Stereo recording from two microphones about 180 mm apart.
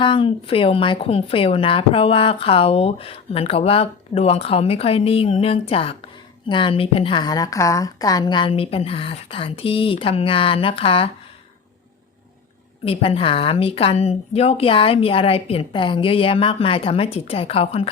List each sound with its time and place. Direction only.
0.0 s a woman's voice: 30° left (ahead or behind)
12.8 s a woman's voice: 30° left (ahead or behind)